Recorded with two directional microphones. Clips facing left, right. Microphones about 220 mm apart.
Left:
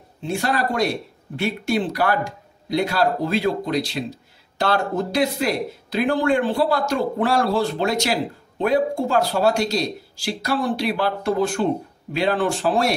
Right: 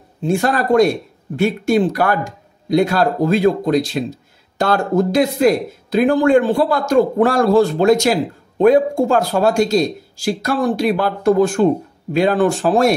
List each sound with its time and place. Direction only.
0.2 s speech: 45° right (ahead or behind)